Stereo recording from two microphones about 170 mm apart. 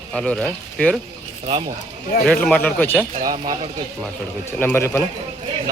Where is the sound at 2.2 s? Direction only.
5° left (ahead or behind).